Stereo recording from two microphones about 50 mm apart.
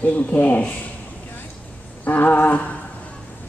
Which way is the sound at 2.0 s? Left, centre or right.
Left.